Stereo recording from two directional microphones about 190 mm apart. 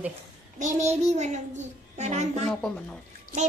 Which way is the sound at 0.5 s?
40° right (ahead or behind).